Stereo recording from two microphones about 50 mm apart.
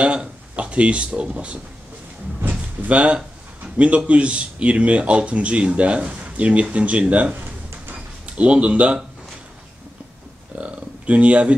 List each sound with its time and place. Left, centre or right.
0.0 s speech: right
2.8 s speech: right
7.9 s drawer open or close: right
10.5 s a sound: right